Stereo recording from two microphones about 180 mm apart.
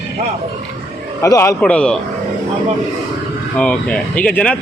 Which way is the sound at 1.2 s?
15° left (ahead or behind).